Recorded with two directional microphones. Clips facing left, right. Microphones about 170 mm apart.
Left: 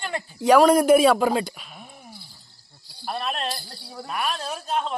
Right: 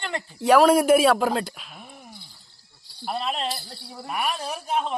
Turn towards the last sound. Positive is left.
turn(degrees=-10)  # may be behind; listen again after turning